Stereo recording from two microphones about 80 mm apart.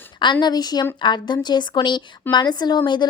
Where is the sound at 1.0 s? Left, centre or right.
Left.